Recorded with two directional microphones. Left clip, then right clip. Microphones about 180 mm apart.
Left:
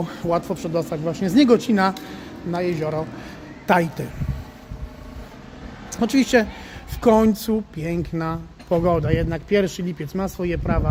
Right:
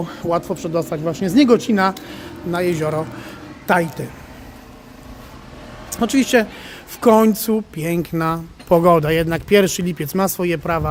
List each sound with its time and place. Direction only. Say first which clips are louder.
0.0 s speech: right 2 dB; 10° right (ahead or behind)
3.7 s speech: right 2 dB; centre (ahead or behind)
5.9 s speech: right 2 dB; 10° right (ahead or behind)